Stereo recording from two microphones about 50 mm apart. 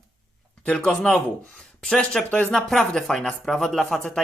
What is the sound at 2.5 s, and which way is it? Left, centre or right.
A man's voice, centre.